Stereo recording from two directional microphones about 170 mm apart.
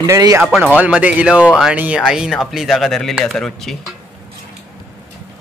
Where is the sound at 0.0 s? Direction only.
20° right (ahead or behind).